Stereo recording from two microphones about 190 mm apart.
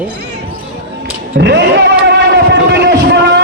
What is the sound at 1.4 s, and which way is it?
Speech, 65° right (ahead or behind).